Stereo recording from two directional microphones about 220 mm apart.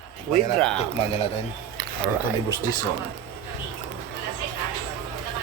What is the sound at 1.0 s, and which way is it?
Speech, 30° left (ahead or behind).